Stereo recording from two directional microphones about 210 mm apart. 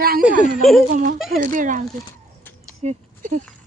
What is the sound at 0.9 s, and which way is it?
Speech, 40° right (ahead or behind).